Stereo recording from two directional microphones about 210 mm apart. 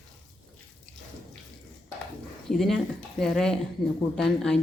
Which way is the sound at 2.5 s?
Centre (ahead or behind).